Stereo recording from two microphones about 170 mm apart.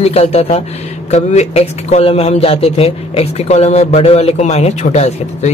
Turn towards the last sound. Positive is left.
turn(degrees=40)  # may be behind; listen again after turning